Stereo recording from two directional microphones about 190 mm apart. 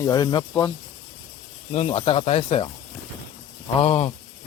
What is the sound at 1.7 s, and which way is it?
Speech, 30° left (ahead or behind).